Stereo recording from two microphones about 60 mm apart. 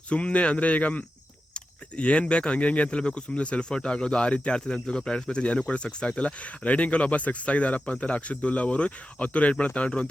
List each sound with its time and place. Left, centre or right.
0.1 s speech: left